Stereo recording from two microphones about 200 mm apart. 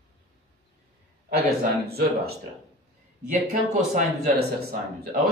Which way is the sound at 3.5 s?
45° right (ahead or behind).